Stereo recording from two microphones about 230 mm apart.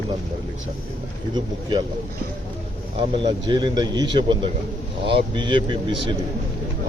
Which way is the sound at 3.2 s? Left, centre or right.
Centre.